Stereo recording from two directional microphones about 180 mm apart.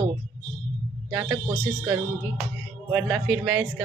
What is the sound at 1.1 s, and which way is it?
Speech, 15° right (ahead or behind).